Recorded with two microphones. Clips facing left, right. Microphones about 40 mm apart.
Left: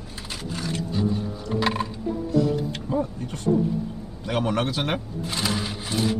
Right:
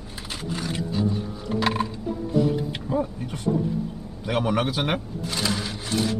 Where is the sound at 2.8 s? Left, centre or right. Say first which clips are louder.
Right 1 dB; centre.